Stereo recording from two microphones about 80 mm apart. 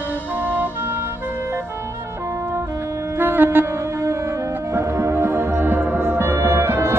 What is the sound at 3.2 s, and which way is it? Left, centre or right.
Wind instrument, right.